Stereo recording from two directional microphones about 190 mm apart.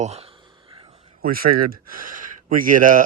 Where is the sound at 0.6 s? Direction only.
25° right (ahead or behind).